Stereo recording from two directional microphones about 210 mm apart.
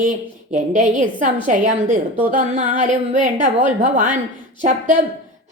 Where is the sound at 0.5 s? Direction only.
35° right (ahead or behind).